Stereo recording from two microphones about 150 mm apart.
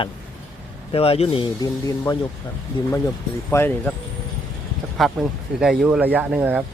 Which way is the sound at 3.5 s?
15° left (ahead or behind).